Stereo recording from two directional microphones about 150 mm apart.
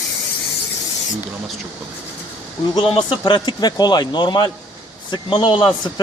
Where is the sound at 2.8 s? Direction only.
35° left (ahead or behind).